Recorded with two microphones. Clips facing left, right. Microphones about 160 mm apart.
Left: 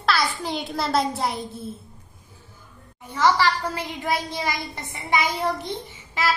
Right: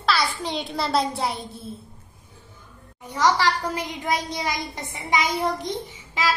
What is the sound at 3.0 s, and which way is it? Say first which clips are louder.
A woman's voice: left 1 dB; 15° right (ahead or behind).